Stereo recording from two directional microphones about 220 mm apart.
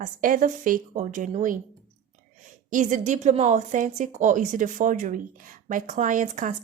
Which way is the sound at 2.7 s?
35° right (ahead or behind).